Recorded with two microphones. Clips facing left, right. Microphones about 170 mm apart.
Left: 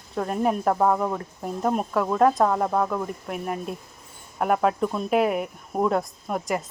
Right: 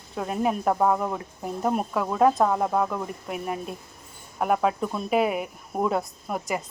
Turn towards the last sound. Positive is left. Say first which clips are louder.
# left 2 dB
turn(degrees=0)  # may be behind; listen again after turning